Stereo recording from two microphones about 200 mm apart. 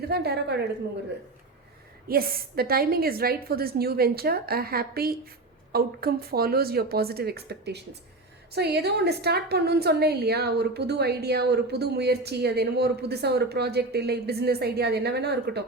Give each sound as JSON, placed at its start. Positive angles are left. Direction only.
{"t": 0.1, "sound": "a woman's voice", "side_deg": -55}
{"t": 2.0, "sound": "a woman's voice", "side_deg": -50}